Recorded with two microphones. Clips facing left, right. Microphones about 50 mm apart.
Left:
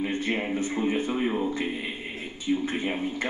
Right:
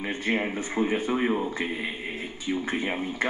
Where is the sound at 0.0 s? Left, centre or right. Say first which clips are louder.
Even; right.